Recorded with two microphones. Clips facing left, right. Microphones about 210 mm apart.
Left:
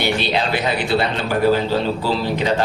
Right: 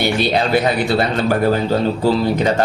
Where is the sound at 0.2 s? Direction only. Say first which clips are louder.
Right 5 dB; 45° right (ahead or behind).